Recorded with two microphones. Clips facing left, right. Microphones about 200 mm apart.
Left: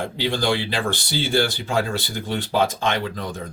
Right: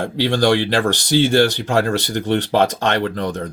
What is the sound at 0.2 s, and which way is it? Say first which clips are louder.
Speech: right 7 dB; 80° right.